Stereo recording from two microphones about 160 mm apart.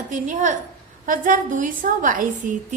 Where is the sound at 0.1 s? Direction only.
50° right (ahead or behind).